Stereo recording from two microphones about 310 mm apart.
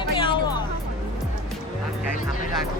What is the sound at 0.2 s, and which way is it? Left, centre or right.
Music, centre.